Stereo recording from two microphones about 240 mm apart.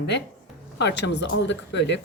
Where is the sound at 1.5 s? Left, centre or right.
Left.